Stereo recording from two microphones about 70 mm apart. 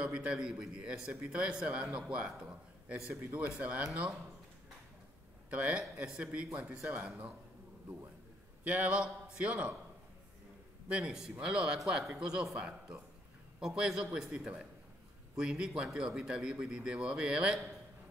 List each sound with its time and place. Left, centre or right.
0.0 s a man's voice: centre
5.5 s a man's voice: centre
8.6 s a man's voice: right
10.9 s a man's voice: centre